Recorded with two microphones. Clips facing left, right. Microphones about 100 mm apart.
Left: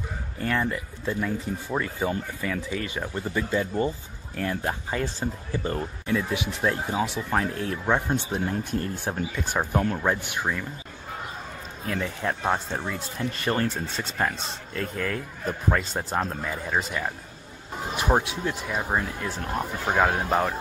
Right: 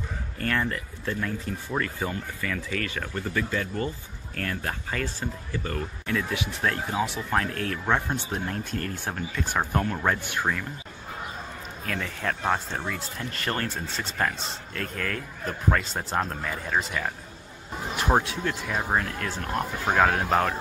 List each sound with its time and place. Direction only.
0.4 s speech: 10° left (ahead or behind)
7.2 s speech: 5° left (ahead or behind)
7.5 s speech: 20° left (ahead or behind)
11.8 s speech: 25° left (ahead or behind)
18.2 s speech: 20° left (ahead or behind)